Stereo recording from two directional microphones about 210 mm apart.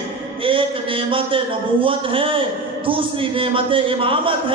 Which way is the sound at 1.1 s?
25° right (ahead or behind).